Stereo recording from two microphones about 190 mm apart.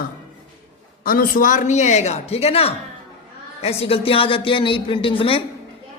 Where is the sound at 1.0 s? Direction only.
50° left (ahead or behind).